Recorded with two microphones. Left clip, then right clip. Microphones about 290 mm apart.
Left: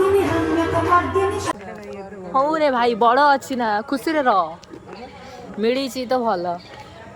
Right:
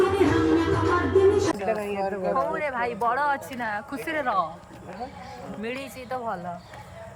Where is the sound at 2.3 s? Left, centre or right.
Left.